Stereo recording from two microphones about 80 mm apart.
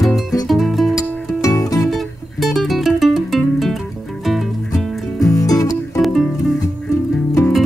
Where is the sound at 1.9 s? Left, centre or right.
Centre.